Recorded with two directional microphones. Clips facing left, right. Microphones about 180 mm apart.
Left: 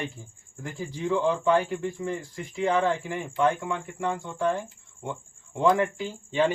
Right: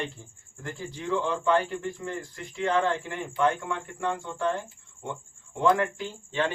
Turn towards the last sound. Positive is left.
turn(degrees=10)  # may be behind; listen again after turning